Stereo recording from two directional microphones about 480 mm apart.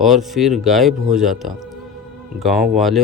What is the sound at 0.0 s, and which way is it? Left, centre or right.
Speech, centre.